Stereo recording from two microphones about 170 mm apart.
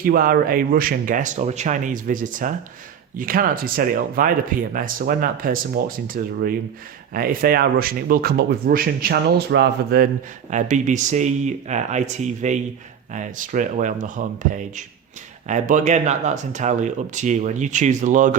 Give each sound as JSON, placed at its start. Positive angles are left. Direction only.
{"t": 0.0, "sound": "speech", "side_deg": -60}
{"t": 10.5, "sound": "speech", "side_deg": -45}